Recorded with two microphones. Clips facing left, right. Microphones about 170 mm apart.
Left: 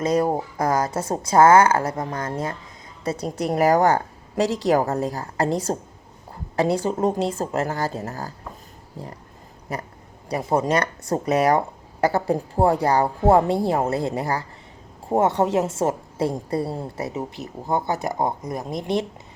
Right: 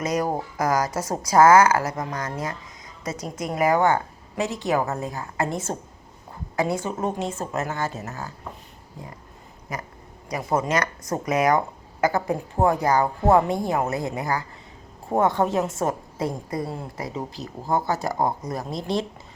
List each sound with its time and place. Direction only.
0.0 s a woman's voice: 25° left (ahead or behind)
9.7 s a woman's voice: 30° left (ahead or behind)